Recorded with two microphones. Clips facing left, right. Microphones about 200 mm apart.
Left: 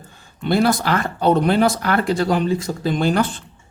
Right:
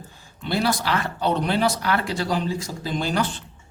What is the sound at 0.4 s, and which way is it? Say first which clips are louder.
A man's voice: left 6 dB; 50° left (ahead or behind).